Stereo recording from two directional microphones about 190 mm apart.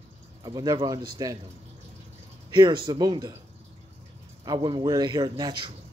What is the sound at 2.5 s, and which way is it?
Speech, 25° right (ahead or behind).